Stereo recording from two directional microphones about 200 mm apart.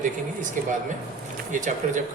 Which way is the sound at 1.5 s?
40° right (ahead or behind).